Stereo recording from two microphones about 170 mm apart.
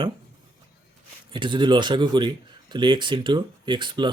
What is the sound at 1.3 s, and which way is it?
A man's voice, 30° right (ahead or behind).